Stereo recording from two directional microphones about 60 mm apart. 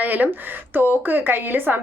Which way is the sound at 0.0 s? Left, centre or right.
Right.